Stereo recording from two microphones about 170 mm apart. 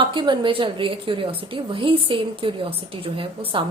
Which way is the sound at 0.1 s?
30° right (ahead or behind).